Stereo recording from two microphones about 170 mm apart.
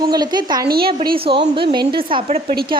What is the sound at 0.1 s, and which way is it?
Speech, 25° right (ahead or behind).